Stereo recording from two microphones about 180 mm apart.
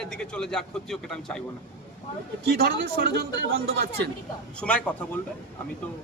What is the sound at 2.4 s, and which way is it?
A man's voice, 65° right (ahead or behind).